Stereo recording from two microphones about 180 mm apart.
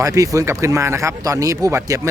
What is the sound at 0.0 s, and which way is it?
Speech, 20° right (ahead or behind).